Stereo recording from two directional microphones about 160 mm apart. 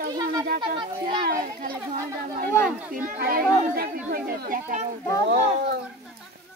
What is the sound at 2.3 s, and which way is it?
Speech, 65° right (ahead or behind).